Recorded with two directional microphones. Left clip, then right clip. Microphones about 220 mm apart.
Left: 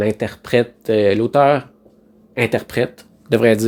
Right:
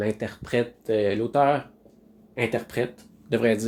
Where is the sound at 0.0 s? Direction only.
35° left (ahead or behind).